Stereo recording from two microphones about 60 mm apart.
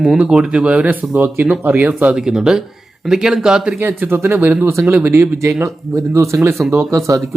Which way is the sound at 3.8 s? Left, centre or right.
Right.